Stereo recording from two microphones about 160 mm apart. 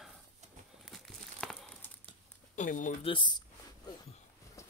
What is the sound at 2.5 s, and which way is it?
Speech, 55° left (ahead or behind).